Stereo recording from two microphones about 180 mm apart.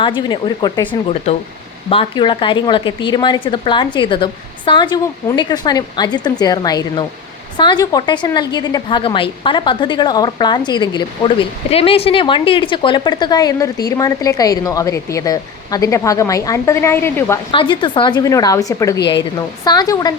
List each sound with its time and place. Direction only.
0.0 s speech: 25° left (ahead or behind)
1.9 s speech: 30° left (ahead or behind); by 17.4 s 15° left (ahead or behind)
17.5 s speech: 25° left (ahead or behind)